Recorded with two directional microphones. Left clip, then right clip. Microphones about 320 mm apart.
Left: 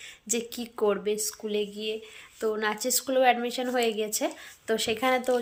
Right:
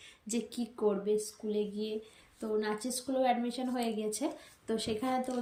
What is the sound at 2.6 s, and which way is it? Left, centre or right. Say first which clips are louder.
Speech: left 7 dB; centre.